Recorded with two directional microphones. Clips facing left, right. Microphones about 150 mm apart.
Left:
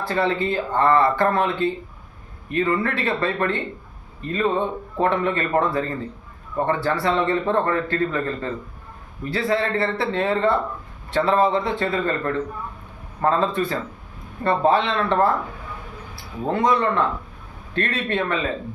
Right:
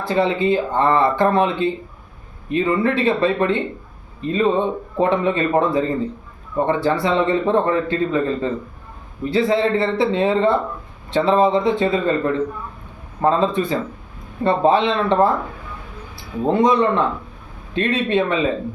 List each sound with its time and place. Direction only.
0.0 s a man's voice: 15° right (ahead or behind)
16.5 s a man's voice: 20° right (ahead or behind)